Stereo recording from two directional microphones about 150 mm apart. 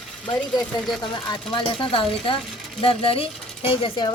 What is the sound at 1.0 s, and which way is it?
Speech, 30° left (ahead or behind).